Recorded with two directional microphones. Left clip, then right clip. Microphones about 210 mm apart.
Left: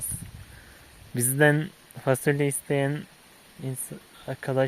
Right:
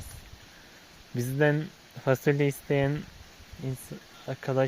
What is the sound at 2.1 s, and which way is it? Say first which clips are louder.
Speech: left 1 dB; 10° left (ahead or behind).